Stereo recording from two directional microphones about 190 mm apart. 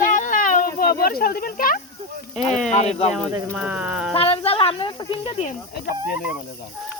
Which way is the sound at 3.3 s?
10° right (ahead or behind).